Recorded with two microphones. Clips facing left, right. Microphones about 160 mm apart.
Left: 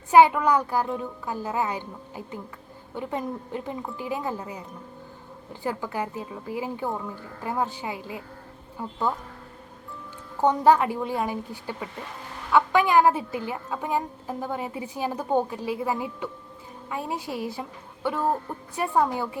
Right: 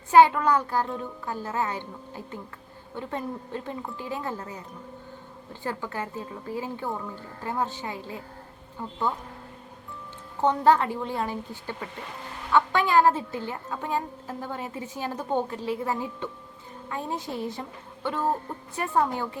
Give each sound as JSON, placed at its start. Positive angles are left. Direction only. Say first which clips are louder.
{"t": 0.1, "sound": "a woman's voice", "louder": "left 1 dB", "side_deg": 15}
{"t": 5.6, "sound": "a woman's voice", "louder": "left 3 dB", "side_deg": 15}
{"t": 10.4, "sound": "a woman's voice", "louder": "left 2 dB", "side_deg": 15}